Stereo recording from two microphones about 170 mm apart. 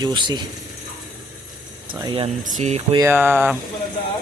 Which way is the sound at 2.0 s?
30° right (ahead or behind).